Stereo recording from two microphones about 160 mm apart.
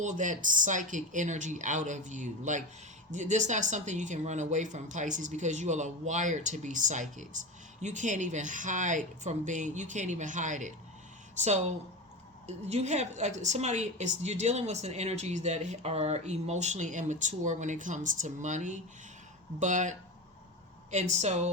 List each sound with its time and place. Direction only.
0.0 s speech: 50° right (ahead or behind)